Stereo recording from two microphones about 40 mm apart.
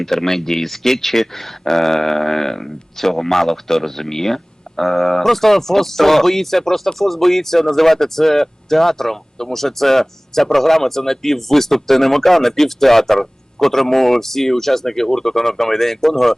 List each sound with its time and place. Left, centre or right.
0.0 s speech: centre